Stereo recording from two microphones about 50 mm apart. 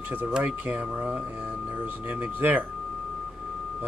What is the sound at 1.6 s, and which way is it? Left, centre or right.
Speech, right.